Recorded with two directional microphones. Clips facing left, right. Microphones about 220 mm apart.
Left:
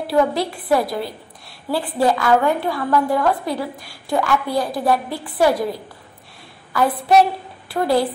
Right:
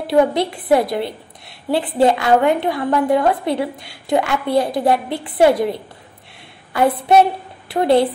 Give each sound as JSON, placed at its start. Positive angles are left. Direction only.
{"t": 0.0, "sound": "a woman's voice", "side_deg": -25}
{"t": 6.8, "sound": "a woman's voice", "side_deg": -25}